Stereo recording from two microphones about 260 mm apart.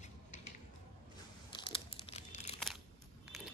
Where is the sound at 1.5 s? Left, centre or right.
Centre.